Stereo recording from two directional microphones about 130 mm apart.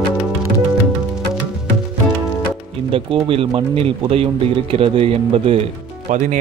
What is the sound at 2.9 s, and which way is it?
Speech, 45° right (ahead or behind).